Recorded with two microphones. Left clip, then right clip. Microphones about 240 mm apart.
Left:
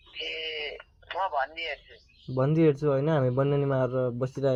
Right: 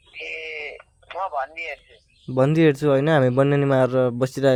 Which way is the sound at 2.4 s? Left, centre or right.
Right.